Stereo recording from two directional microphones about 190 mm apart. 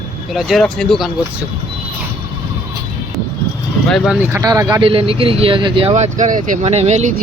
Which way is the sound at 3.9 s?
Centre (ahead or behind).